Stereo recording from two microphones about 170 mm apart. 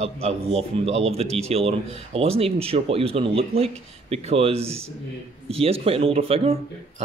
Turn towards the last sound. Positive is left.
turn(degrees=-35)  # may be behind; listen again after turning